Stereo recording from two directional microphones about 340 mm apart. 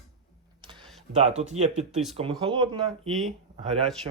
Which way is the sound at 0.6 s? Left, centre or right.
Centre.